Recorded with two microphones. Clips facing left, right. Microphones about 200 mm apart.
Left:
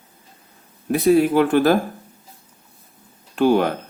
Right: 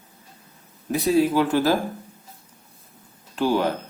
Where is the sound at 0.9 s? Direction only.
60° left (ahead or behind).